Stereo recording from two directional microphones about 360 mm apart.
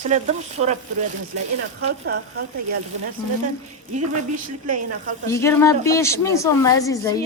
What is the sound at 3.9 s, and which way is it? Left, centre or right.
Speech, right.